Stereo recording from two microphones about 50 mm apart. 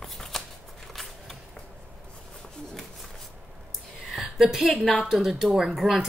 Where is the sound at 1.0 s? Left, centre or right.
Centre.